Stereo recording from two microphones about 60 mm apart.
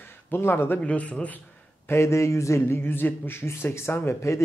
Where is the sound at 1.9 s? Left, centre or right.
Left.